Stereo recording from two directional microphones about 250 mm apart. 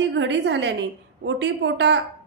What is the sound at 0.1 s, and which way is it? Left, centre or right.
A woman's voice, right.